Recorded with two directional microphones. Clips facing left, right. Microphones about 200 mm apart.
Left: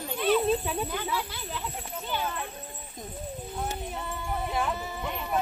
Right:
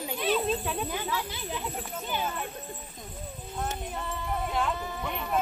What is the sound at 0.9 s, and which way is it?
Speech, 15° right (ahead or behind).